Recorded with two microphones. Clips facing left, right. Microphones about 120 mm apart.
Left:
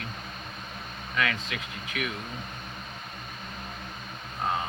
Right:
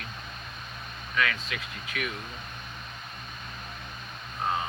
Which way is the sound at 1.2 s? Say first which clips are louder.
Even; 25° left (ahead or behind).